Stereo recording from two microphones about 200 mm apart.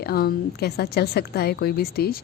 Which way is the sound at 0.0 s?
50° left (ahead or behind).